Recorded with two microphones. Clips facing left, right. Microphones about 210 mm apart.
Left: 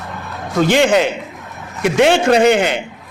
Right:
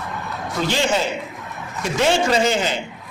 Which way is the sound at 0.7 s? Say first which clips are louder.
Left 7 dB; 70° left (ahead or behind).